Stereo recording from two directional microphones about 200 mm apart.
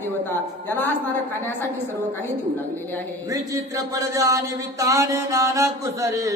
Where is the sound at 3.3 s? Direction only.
15° right (ahead or behind).